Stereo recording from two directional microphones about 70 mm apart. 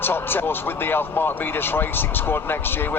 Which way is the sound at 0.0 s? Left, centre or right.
Left.